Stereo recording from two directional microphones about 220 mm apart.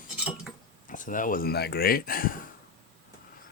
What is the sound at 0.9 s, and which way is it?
Speech, 35° left (ahead or behind).